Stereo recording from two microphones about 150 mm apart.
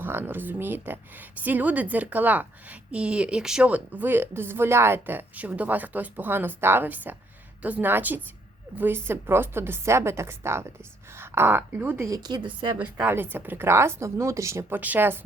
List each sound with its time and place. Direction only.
0.0 s a woman's voice: 15° right (ahead or behind); by 12.7 s 35° right (ahead or behind)
12.8 s a woman's voice: 10° right (ahead or behind)